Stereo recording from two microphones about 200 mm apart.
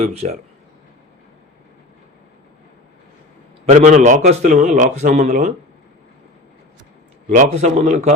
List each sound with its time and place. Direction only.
0.0 s a man's voice: 30° right (ahead or behind)
3.7 s a man's voice: 35° right (ahead or behind)
7.3 s a man's voice: 35° right (ahead or behind)